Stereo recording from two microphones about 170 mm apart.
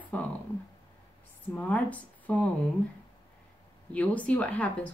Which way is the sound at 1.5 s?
10° left (ahead or behind).